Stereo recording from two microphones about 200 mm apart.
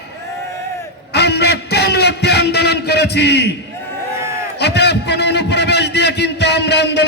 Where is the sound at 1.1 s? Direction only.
55° left (ahead or behind).